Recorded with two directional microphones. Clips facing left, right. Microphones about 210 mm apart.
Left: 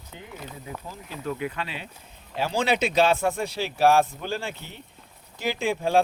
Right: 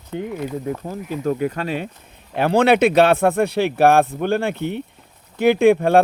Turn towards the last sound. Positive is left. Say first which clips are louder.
# right 11 dB
turn(degrees=-60)  # may be behind; listen again after turning